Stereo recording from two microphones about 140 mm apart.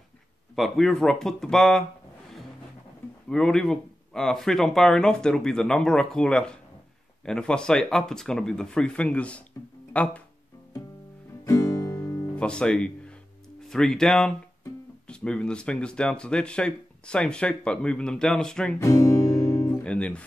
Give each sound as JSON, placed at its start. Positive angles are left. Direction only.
{"t": 0.6, "sound": "speech", "side_deg": 0}
{"t": 3.3, "sound": "speech", "side_deg": 5}
{"t": 11.4, "sound": "guitar", "side_deg": 25}
{"t": 12.4, "sound": "speech", "side_deg": 5}
{"t": 18.8, "sound": "speech", "side_deg": 25}
{"t": 19.4, "sound": "music", "side_deg": 20}
{"t": 19.8, "sound": "speech", "side_deg": 5}